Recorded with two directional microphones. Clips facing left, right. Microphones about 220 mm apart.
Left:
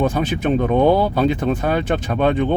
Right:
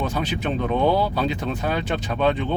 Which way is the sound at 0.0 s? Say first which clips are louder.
Left 6 dB; 50° left (ahead or behind).